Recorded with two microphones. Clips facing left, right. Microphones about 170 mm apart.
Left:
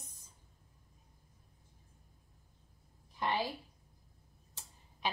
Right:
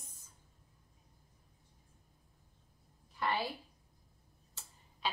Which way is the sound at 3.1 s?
15° left (ahead or behind).